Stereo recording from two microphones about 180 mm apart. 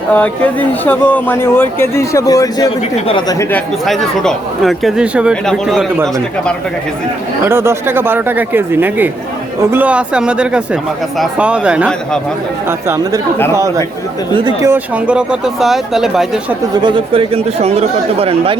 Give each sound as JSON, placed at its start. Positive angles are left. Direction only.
{"t": 0.1, "sound": "a woman's voice", "side_deg": 10}
{"t": 3.5, "sound": "speech", "side_deg": 0}
{"t": 7.4, "sound": "speech", "side_deg": -15}
{"t": 14.3, "sound": "speech", "side_deg": -25}
{"t": 14.7, "sound": "speech", "side_deg": -5}
{"t": 16.7, "sound": "speech", "side_deg": -25}